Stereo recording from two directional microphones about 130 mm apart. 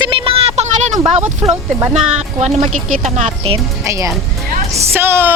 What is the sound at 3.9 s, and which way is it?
Speech, 25° right (ahead or behind).